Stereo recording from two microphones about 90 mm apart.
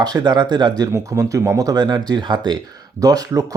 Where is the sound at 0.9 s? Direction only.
35° right (ahead or behind); by 2.6 s 55° right (ahead or behind).